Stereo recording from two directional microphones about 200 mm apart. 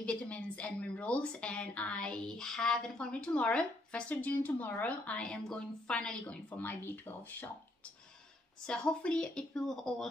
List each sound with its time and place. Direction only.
0.0 s speech: 5° left (ahead or behind)
8.6 s speech: 5° left (ahead or behind)